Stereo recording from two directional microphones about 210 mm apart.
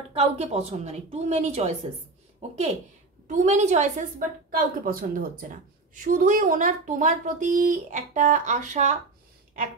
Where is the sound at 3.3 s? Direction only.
35° right (ahead or behind).